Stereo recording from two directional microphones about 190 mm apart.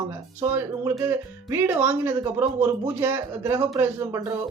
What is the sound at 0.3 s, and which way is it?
Speech, 10° right (ahead or behind).